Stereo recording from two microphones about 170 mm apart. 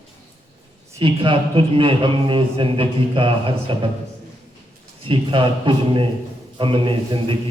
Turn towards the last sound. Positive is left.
turn(degrees=-30)  # may be behind; listen again after turning